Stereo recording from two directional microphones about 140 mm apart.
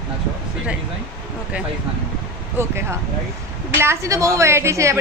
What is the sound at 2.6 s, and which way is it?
A woman's voice, 15° right (ahead or behind).